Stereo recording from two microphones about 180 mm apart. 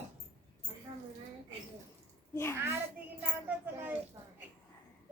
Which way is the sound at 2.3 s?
15° left (ahead or behind).